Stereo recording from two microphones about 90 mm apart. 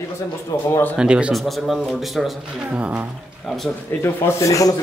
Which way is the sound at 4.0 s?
30° left (ahead or behind).